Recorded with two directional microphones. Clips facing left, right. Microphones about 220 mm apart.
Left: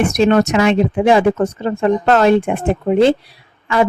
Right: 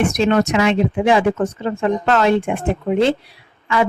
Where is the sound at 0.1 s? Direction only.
45° left (ahead or behind).